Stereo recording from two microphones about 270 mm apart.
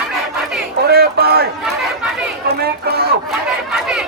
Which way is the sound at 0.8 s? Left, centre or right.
Right.